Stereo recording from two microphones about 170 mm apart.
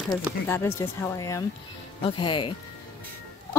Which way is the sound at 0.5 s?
15° left (ahead or behind).